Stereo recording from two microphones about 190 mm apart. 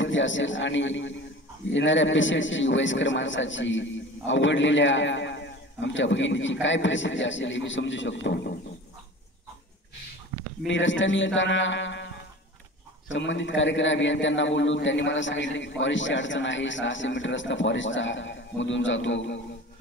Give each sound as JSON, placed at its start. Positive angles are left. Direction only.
{"t": 0.0, "sound": "a man's voice", "side_deg": 80}
{"t": 10.7, "sound": "a man's voice", "side_deg": 75}
{"t": 13.1, "sound": "a man's voice", "side_deg": 75}